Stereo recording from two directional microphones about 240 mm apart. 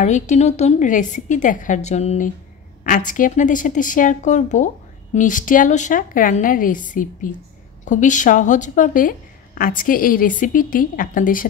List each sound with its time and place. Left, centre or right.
0.0 s a woman's voice: left